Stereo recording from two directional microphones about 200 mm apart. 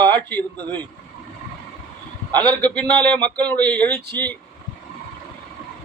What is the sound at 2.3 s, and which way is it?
Speech, 20° right (ahead or behind).